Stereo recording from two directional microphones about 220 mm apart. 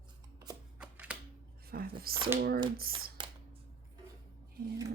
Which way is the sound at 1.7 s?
45° right (ahead or behind).